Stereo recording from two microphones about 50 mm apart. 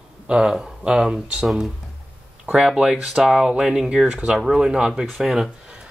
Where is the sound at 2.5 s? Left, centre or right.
Centre.